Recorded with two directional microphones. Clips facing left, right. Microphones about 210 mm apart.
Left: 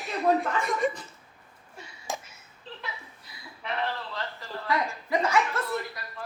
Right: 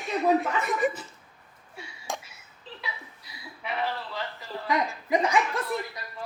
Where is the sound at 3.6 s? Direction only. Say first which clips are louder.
Right 1 dB; 5° right (ahead or behind).